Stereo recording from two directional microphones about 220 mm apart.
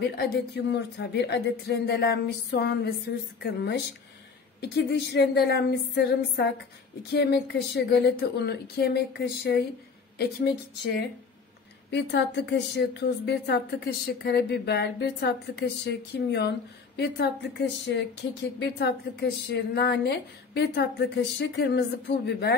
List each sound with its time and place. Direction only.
0.2 s a woman's voice: 50° left (ahead or behind)